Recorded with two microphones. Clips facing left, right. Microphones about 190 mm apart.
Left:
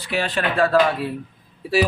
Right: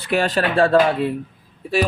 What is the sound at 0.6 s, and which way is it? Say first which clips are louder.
Speech: right 2 dB; 30° right (ahead or behind).